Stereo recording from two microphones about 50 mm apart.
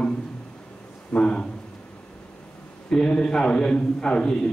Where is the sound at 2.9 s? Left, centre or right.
Centre.